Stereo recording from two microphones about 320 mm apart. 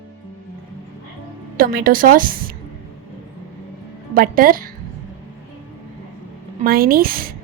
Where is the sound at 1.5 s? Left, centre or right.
Right.